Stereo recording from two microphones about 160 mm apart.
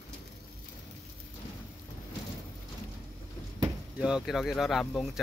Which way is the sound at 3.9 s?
5° right (ahead or behind).